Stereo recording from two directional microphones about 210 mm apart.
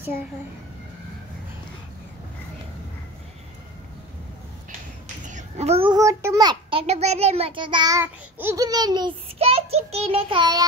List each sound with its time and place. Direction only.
5.2 s a child's voice: 35° right (ahead or behind); by 10.7 s 20° right (ahead or behind)